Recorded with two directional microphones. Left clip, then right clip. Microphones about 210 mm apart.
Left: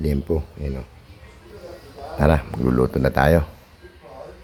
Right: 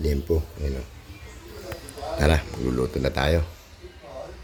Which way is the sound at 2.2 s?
15° left (ahead or behind).